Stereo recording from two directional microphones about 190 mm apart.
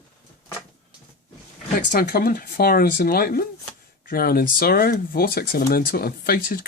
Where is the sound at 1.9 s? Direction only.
55° left (ahead or behind).